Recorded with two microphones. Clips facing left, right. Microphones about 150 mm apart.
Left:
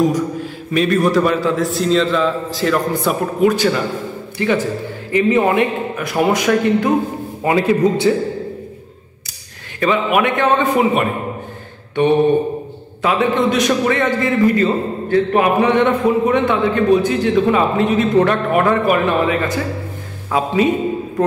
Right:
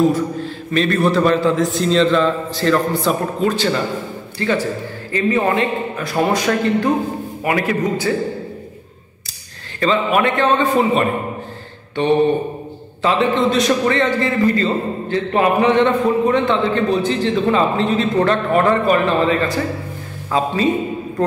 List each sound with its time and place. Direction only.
0.1 s a man's voice: 10° left (ahead or behind)
9.8 s a man's voice: 10° left (ahead or behind)
13.0 s a man's voice: 15° left (ahead or behind)